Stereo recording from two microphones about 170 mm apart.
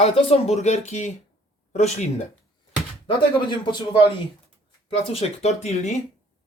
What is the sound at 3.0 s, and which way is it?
Speech, 30° left (ahead or behind).